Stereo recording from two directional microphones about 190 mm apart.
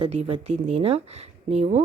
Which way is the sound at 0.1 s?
30° right (ahead or behind).